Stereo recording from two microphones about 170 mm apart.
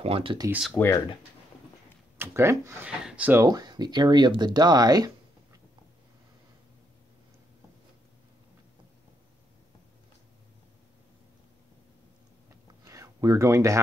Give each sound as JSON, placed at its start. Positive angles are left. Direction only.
{"t": 0.0, "sound": "speech", "side_deg": -35}
{"t": 0.5, "sound": "speech", "side_deg": 0}
{"t": 0.7, "sound": "speech", "side_deg": 10}
{"t": 2.1, "sound": "speech", "side_deg": -15}
{"t": 3.4, "sound": "speech", "side_deg": -25}
{"t": 12.8, "sound": "a sound", "side_deg": -20}